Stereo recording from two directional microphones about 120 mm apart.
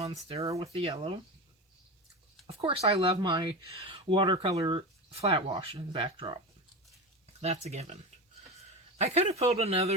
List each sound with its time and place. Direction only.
0.6 s speech: 55° right (ahead or behind)
2.5 s speech: 55° right (ahead or behind)
3.2 s speech: 40° right (ahead or behind)
5.1 s speech: 55° right (ahead or behind)
7.4 s speech: 65° right (ahead or behind)